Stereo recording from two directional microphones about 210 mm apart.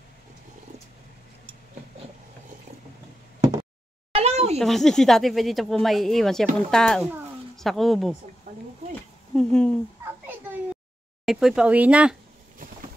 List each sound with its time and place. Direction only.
4.1 s a sound: 30° right (ahead or behind)
4.6 s speech: centre (ahead or behind)
9.3 s speech: centre (ahead or behind)
11.2 s speech: centre (ahead or behind)